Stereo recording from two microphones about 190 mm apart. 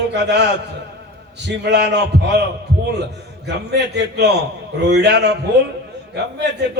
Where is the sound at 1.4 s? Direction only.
65° right (ahead or behind).